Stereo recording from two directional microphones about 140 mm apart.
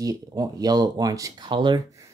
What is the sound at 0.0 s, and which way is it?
Speech, 25° right (ahead or behind).